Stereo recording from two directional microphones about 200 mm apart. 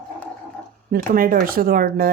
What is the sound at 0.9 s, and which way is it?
Speech, 45° right (ahead or behind).